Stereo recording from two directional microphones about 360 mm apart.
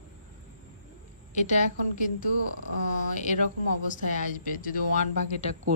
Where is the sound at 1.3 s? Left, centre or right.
Centre.